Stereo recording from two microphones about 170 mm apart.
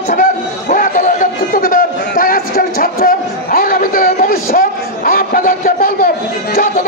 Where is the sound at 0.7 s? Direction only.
50° left (ahead or behind).